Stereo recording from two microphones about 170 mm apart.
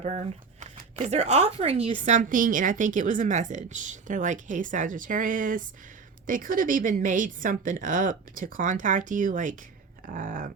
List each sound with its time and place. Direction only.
0.0 s speech: 40° right (ahead or behind)
2.0 s a woman's voice: 50° right (ahead or behind)